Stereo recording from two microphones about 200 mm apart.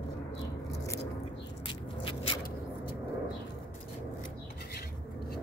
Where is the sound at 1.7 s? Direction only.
25° left (ahead or behind).